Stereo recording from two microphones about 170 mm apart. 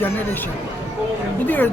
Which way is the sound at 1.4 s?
10° left (ahead or behind).